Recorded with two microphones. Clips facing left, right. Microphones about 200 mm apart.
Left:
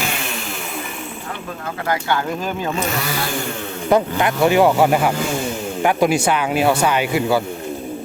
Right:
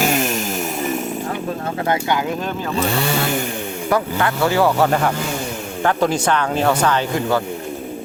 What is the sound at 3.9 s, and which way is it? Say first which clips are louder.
Speech: left 3 dB; 20° left (ahead or behind).